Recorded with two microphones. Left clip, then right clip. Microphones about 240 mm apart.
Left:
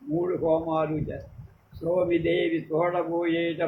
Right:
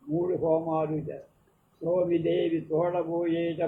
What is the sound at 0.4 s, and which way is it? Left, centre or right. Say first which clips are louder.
A man's voice: left 3 dB; left.